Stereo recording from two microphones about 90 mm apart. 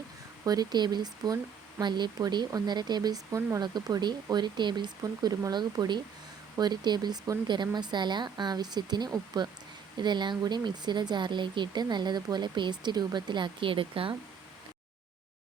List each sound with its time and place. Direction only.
0.4 s speech: 45° right (ahead or behind); by 14.2 s 80° right